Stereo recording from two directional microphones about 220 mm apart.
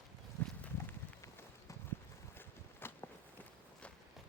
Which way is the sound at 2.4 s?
10° left (ahead or behind).